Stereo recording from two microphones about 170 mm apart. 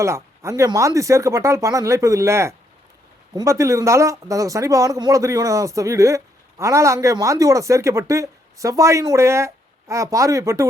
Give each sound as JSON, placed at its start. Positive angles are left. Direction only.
{"t": 0.0, "sound": "speech", "side_deg": -15}